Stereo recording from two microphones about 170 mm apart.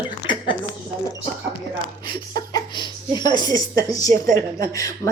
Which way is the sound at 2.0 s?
25° left (ahead or behind).